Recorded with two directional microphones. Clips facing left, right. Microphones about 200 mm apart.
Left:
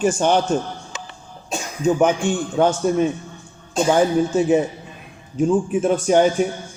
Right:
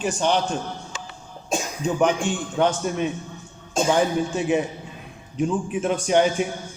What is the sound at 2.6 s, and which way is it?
Speech, 45° left (ahead or behind).